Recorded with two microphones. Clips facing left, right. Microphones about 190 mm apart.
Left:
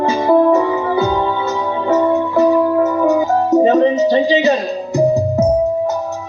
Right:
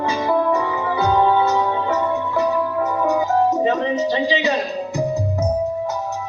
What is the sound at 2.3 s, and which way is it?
Music, 45° left (ahead or behind).